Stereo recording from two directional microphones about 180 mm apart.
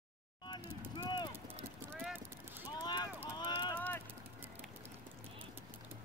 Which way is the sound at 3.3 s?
25° left (ahead or behind).